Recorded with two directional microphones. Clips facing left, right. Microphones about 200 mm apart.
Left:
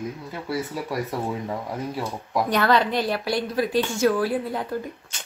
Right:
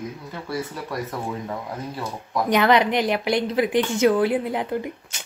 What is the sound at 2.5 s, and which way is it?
Speech, 15° right (ahead or behind).